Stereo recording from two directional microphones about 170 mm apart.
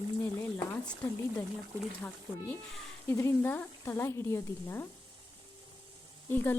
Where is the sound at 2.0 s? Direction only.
10° left (ahead or behind).